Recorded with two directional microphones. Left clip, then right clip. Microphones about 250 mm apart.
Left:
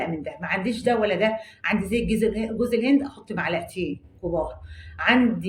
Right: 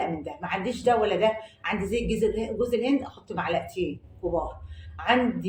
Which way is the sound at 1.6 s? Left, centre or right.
Left.